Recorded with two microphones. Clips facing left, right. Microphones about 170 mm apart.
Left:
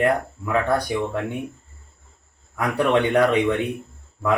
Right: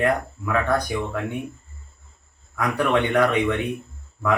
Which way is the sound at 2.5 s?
30° left (ahead or behind).